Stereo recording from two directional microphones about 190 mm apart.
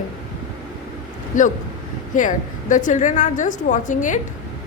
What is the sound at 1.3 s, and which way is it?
A woman's voice, 45° left (ahead or behind).